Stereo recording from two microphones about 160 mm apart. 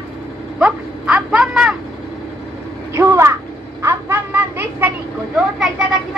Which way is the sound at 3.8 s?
10° right (ahead or behind).